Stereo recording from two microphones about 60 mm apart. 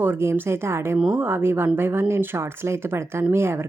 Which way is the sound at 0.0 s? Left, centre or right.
Right.